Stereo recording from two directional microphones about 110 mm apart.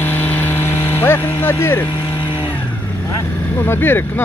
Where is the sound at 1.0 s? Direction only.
20° left (ahead or behind).